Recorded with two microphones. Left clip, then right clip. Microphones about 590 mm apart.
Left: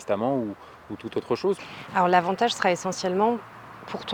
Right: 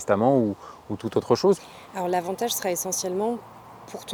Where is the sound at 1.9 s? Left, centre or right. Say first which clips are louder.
Left 6 dB; left.